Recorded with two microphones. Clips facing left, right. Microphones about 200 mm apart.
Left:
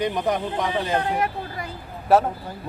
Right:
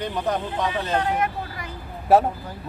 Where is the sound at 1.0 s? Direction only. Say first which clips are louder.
Even; 30° left (ahead or behind).